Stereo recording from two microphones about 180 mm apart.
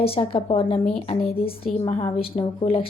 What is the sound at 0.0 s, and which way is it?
Speech, 30° left (ahead or behind).